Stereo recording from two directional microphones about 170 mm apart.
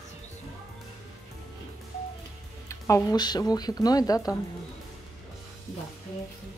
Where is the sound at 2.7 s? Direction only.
15° left (ahead or behind).